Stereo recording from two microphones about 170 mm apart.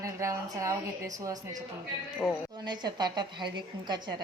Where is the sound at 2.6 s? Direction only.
25° right (ahead or behind).